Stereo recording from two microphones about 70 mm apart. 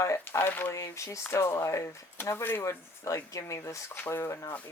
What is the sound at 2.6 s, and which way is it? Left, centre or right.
Speech, left.